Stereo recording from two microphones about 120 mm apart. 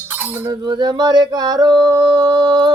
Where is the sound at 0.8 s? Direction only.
35° right (ahead or behind).